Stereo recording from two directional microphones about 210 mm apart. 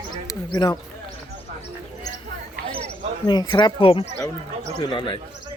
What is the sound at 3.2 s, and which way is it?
Speech, 20° left (ahead or behind).